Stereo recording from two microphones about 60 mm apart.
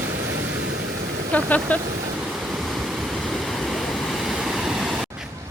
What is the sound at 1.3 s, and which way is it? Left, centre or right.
Speech, left.